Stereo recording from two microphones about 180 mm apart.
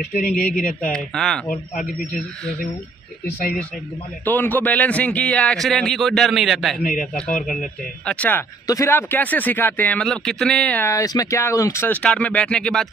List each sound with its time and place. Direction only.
0.6 s speech: 50° left (ahead or behind)
0.9 s a man's voice: 5° left (ahead or behind)
4.2 s a man's voice: 10° left (ahead or behind)
6.8 s speech: 50° left (ahead or behind)
8.0 s speech: 5° left (ahead or behind)